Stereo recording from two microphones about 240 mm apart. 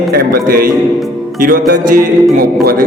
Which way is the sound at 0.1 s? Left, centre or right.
Right.